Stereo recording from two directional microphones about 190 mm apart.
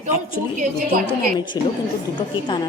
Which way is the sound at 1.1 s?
25° left (ahead or behind).